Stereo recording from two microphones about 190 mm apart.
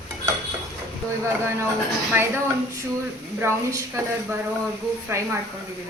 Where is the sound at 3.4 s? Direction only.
15° right (ahead or behind).